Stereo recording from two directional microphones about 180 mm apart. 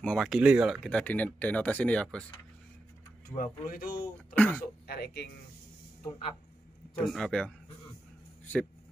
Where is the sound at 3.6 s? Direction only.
55° left (ahead or behind).